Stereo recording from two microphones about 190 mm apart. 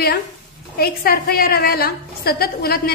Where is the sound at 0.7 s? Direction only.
55° left (ahead or behind).